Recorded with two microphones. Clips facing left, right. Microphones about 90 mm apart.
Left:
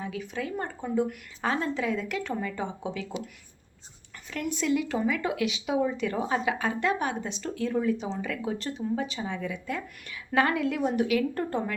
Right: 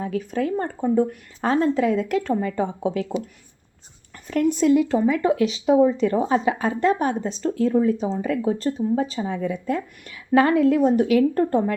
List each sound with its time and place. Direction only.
0.0 s speech: 45° right (ahead or behind)
4.3 s speech: 40° right (ahead or behind)